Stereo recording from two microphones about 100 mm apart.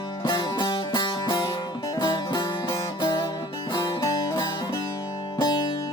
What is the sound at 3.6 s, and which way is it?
Music, 50° left (ahead or behind).